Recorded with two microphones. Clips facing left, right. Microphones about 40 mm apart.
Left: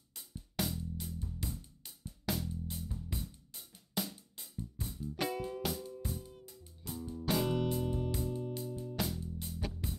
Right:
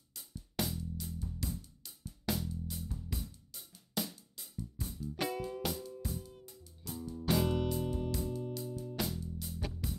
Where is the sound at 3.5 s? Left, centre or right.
Left.